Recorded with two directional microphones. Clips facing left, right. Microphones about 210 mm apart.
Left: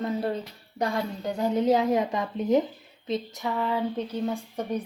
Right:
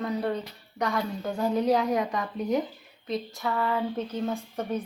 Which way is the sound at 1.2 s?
20° left (ahead or behind).